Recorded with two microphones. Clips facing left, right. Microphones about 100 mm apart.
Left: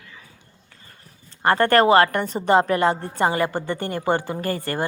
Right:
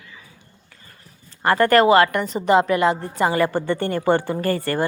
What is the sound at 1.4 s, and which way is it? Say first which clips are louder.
A woman's voice: right 1 dB; 30° left (ahead or behind).